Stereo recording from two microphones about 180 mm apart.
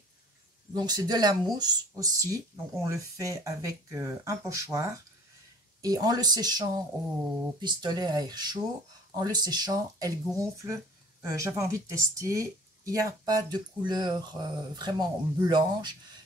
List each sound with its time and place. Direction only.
0.7 s speech: 20° right (ahead or behind)